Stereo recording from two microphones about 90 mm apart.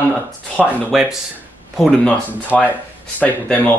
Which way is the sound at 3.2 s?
15° left (ahead or behind).